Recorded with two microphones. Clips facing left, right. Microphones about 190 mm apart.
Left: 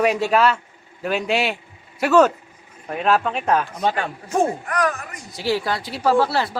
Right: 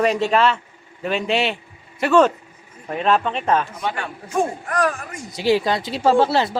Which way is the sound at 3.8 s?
45° left (ahead or behind).